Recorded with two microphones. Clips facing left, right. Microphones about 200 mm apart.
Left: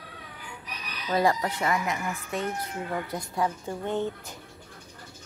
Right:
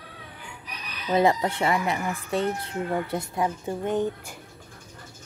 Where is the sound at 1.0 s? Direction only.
25° right (ahead or behind).